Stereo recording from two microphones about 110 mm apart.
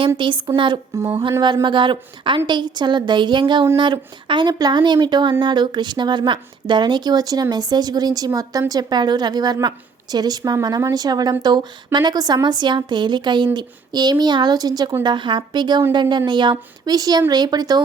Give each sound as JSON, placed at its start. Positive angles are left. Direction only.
{"t": 0.2, "sound": "a woman's voice", "side_deg": -50}
{"t": 0.9, "sound": "a sound", "side_deg": -25}
{"t": 1.6, "sound": "a woman's voice", "side_deg": -45}